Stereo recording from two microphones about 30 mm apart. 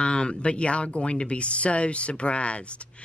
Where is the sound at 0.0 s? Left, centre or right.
Left.